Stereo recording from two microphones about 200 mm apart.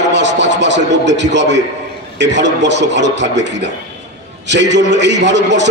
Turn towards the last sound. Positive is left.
turn(degrees=-60)  # may be behind; listen again after turning